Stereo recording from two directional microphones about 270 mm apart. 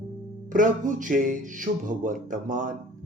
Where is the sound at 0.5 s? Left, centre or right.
Right.